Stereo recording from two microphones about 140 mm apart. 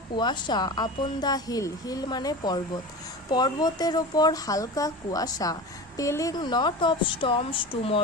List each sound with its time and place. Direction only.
0.2 s a woman's voice: 30° left (ahead or behind)